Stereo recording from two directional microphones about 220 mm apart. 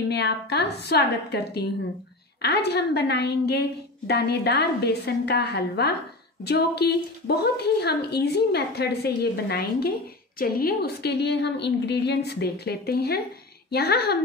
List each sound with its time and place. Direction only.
0.1 s a woman's voice: 50° left (ahead or behind)